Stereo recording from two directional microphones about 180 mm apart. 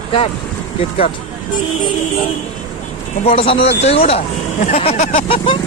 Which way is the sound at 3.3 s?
30° left (ahead or behind).